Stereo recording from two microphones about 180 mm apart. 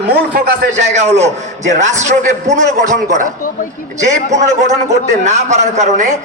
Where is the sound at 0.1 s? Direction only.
60° right (ahead or behind).